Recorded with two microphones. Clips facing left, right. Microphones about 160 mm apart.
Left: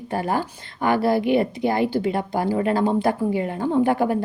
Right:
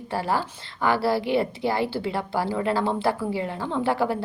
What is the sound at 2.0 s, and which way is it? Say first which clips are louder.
A woman's voice: left 4 dB; 50° left (ahead or behind).